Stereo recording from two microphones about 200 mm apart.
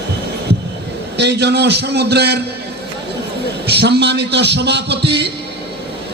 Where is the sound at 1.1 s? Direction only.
60° right (ahead or behind).